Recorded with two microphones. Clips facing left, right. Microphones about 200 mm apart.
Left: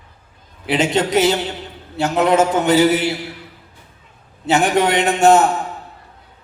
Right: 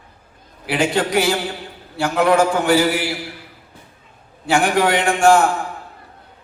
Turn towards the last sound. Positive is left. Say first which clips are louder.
# left 1 dB
turn(degrees=20)  # may be behind; listen again after turning